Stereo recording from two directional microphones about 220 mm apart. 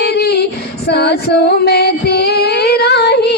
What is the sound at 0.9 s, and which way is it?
Music, 45° left (ahead or behind).